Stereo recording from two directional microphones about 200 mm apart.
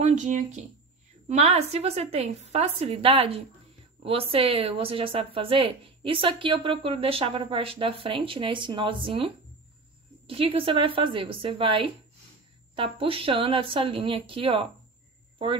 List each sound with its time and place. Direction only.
0.0 s a woman's voice: 40° right (ahead or behind)